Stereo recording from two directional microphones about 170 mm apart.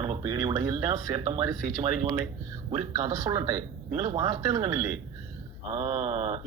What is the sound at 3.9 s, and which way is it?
Speech, 40° right (ahead or behind).